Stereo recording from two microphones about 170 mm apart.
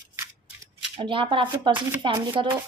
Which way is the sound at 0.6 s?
30° right (ahead or behind).